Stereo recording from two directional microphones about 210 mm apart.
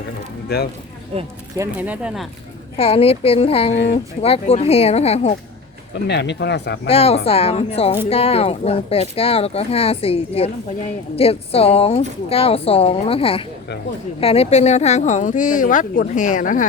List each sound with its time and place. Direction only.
0.4 s speech: 50° left (ahead or behind)
1.5 s speech: 10° right (ahead or behind)
2.7 s speech: 30° left (ahead or behind)
6.1 s speech: 55° left (ahead or behind)
6.8 s speech: 30° left (ahead or behind)